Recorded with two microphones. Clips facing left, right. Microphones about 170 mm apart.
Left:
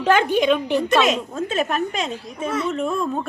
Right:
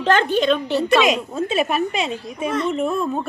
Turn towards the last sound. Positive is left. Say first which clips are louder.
# right 2 dB
turn(degrees=-5)  # may be behind; listen again after turning